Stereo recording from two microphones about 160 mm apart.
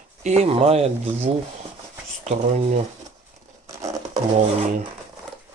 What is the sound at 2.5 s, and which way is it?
Speech, 40° right (ahead or behind).